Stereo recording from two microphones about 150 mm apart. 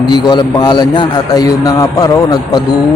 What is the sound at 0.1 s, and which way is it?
A man's voice, 30° left (ahead or behind).